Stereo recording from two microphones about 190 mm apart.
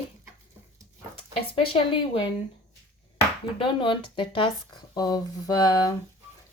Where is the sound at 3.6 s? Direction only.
25° left (ahead or behind).